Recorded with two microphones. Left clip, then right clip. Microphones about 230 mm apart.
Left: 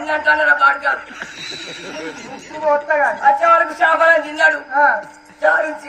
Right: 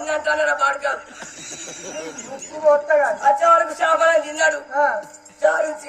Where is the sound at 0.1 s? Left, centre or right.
Right.